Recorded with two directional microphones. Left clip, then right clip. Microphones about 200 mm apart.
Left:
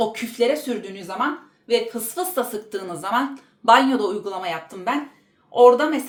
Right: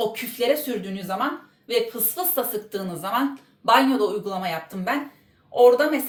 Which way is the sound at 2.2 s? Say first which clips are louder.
Left 2 dB; 40° left (ahead or behind).